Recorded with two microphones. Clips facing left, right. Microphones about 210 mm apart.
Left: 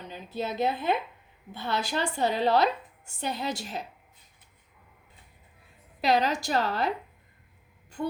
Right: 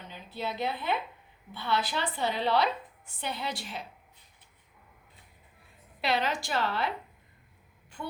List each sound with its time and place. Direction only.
0.1 s a woman's voice: 45° left (ahead or behind)
6.0 s a woman's voice: 40° left (ahead or behind)
8.0 s speech: 45° left (ahead or behind)